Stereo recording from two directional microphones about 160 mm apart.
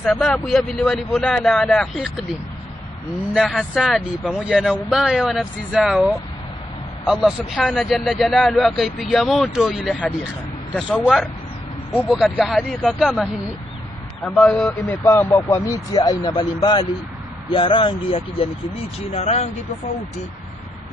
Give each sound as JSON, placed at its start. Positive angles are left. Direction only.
{"t": 0.0, "sound": "a man's voice", "side_deg": 5}
{"t": 3.3, "sound": "a man's voice", "side_deg": 0}
{"t": 14.5, "sound": "a man's voice", "side_deg": 5}
{"t": 14.9, "sound": "speech", "side_deg": 15}